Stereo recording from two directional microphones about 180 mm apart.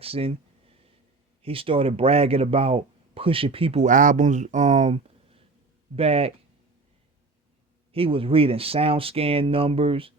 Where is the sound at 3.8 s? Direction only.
45° right (ahead or behind).